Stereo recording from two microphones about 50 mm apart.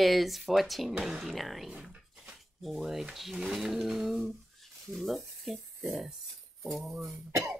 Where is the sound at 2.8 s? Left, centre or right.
Centre.